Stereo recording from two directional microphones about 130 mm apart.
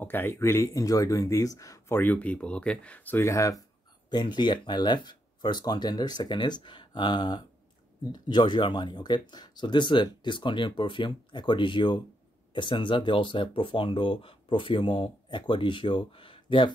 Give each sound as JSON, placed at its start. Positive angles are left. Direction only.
{"t": 0.0, "sound": "speech", "side_deg": 15}
{"t": 4.1, "sound": "speech", "side_deg": 35}